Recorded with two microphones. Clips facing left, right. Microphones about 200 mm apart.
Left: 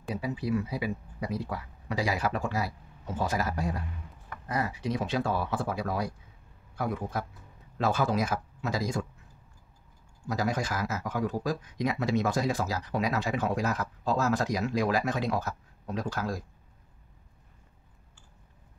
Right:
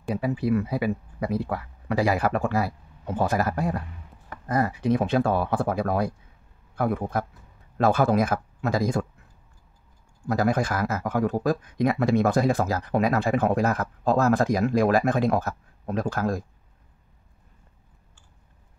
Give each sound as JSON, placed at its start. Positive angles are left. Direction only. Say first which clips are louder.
{"t": 0.1, "sound": "a man's voice", "louder": "right 6 dB", "side_deg": -55}
{"t": 10.2, "sound": "speech", "louder": "right 7 dB", "side_deg": -55}